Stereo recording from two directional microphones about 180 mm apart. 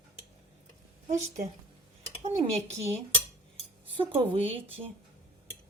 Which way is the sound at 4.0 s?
30° right (ahead or behind).